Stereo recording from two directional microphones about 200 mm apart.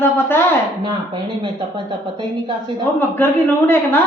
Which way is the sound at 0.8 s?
25° right (ahead or behind).